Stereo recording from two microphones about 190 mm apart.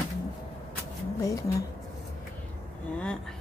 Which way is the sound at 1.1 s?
15° left (ahead or behind).